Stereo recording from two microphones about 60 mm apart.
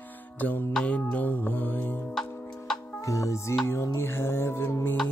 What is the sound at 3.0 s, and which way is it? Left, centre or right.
Music, left.